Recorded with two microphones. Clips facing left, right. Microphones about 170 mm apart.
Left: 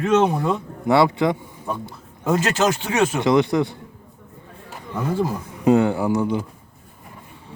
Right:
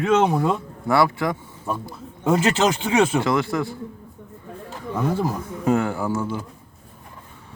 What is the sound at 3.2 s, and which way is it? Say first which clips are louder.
Speech: left 4 dB; 20° left (ahead or behind).